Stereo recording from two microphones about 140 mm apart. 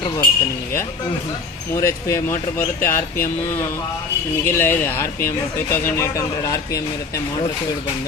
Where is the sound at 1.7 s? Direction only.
20° left (ahead or behind).